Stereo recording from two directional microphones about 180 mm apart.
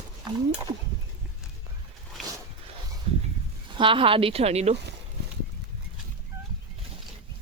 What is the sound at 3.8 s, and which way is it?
Speech, 30° right (ahead or behind).